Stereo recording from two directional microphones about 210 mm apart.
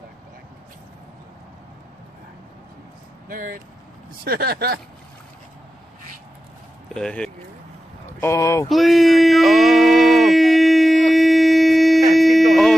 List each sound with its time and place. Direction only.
3.3 s speech: 40° right (ahead or behind)
6.9 s speech: 5° left (ahead or behind)
8.2 s speech: 15° left (ahead or behind)
8.6 s a sound: centre (ahead or behind)